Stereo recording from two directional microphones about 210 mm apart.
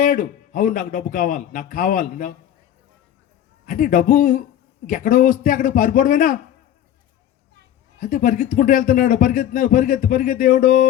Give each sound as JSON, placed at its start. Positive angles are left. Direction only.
{"t": 0.0, "sound": "speech", "side_deg": 40}
{"t": 3.7, "sound": "speech", "side_deg": 40}
{"t": 7.9, "sound": "speech", "side_deg": 40}